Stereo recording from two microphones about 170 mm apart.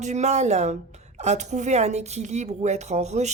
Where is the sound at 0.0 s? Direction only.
40° right (ahead or behind).